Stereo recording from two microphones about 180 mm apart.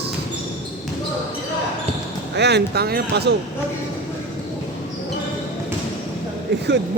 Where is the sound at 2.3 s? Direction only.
65° right (ahead or behind).